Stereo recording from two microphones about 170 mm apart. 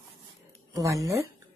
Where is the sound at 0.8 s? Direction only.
20° right (ahead or behind).